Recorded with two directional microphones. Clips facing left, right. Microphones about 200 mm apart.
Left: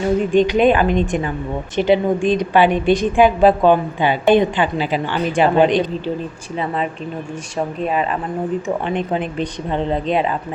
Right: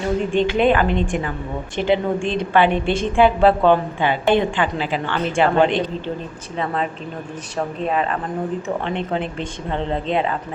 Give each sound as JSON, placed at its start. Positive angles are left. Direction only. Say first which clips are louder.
{"t": 0.3, "sound": "a woman's voice", "louder": "left 3 dB", "side_deg": 15}
{"t": 7.8, "sound": "a woman's voice", "louder": "left 1 dB", "side_deg": 5}